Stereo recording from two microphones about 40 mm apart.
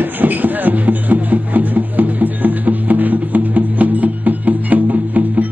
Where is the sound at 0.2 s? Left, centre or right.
Right.